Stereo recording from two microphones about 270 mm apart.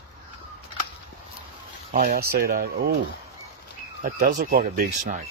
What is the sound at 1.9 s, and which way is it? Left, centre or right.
Speech, right.